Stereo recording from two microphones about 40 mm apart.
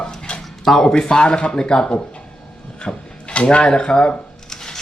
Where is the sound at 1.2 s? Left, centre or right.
Left.